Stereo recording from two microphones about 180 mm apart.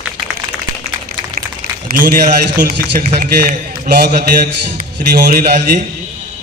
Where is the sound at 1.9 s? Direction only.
55° right (ahead or behind).